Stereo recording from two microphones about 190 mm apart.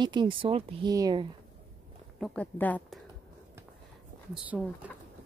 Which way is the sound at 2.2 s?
5° left (ahead or behind).